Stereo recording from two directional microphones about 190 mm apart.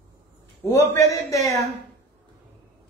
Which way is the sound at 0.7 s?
15° left (ahead or behind).